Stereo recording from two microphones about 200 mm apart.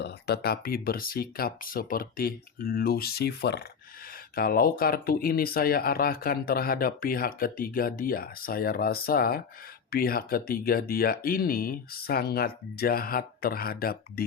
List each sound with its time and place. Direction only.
0.0 s speech: 55° left (ahead or behind)